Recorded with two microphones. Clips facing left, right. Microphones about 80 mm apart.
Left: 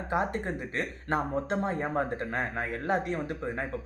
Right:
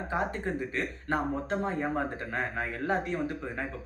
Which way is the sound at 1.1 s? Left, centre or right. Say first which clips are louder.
Left 1 dB; left.